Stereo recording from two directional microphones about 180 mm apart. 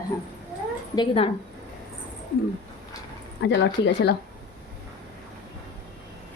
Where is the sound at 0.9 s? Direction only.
30° left (ahead or behind).